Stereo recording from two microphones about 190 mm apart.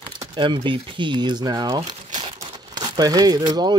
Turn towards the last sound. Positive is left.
turn(degrees=-20)  # may be behind; listen again after turning